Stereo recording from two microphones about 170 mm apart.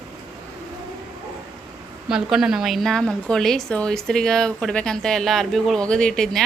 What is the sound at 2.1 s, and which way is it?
A woman's voice, 5° right (ahead or behind).